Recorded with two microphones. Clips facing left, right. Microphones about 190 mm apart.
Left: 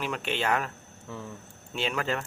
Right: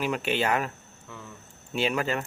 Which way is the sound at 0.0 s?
5° right (ahead or behind).